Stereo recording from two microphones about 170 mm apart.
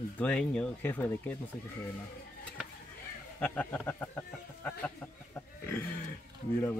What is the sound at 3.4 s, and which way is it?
Speech, 10° left (ahead or behind).